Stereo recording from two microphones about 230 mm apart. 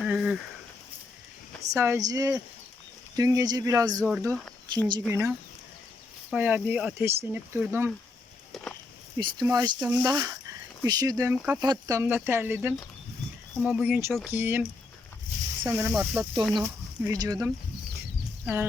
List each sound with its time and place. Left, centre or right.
0.0 s a sound: centre
1.7 s speech: centre
6.3 s speech: centre
8.5 s walk: centre
9.1 s speech: centre